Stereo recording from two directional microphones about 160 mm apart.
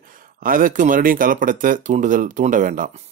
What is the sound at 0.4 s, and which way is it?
Speech, 60° right (ahead or behind).